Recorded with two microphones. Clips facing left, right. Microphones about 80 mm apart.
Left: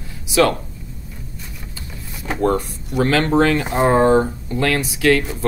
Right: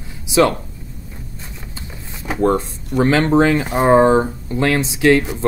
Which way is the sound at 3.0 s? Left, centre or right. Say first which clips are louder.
Right 2 dB; right.